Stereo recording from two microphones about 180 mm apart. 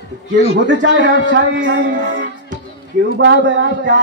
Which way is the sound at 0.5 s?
85° right.